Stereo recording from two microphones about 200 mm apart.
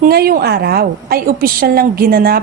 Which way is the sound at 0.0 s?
50° right (ahead or behind).